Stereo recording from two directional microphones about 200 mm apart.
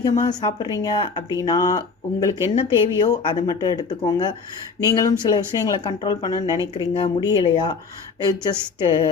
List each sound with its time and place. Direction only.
0.0 s speech: 20° left (ahead or behind)